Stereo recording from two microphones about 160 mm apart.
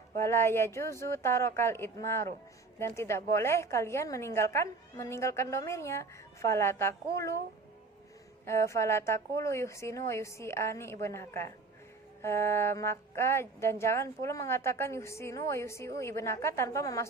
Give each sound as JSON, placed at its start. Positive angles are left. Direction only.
{"t": 0.2, "sound": "a woman's voice", "side_deg": 15}
{"t": 8.4, "sound": "a woman's voice", "side_deg": 20}